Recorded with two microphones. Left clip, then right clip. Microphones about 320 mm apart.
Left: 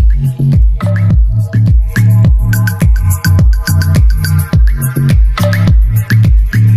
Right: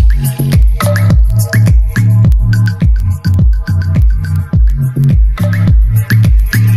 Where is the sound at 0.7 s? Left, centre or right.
Right.